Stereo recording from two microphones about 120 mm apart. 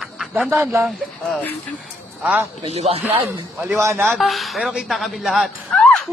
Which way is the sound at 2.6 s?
60° right (ahead or behind).